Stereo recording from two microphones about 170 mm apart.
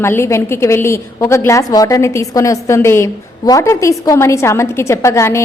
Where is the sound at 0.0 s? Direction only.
15° left (ahead or behind).